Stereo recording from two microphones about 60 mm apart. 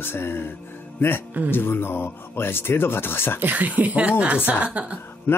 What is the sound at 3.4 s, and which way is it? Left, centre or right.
Speech, right.